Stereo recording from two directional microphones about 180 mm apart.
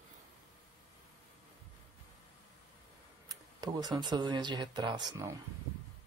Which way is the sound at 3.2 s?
20° right (ahead or behind).